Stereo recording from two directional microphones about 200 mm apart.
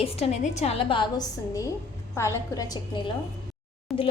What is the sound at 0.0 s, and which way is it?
A woman's voice, 30° left (ahead or behind).